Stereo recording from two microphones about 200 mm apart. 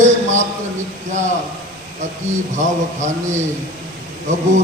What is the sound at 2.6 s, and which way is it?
Speech, 35° right (ahead or behind).